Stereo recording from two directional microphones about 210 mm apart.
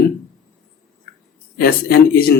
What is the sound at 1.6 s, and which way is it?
Speech, 45° left (ahead or behind).